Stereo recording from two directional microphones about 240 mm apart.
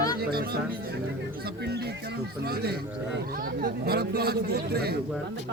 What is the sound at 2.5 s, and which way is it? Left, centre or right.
Speech, right.